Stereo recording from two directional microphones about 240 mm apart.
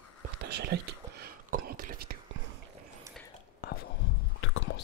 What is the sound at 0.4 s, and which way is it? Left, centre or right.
Whispering, right.